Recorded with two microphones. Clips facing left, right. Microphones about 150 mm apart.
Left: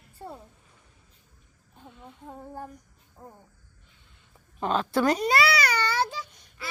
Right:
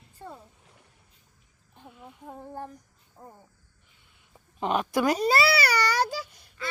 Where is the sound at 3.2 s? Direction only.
5° left (ahead or behind).